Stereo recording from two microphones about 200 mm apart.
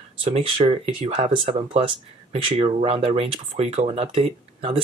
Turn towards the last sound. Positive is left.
turn(degrees=-30)  # may be behind; listen again after turning